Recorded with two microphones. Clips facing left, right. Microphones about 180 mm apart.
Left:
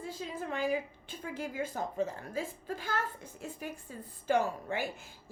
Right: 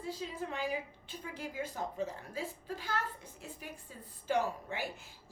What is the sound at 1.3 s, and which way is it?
A woman's voice, 50° left (ahead or behind).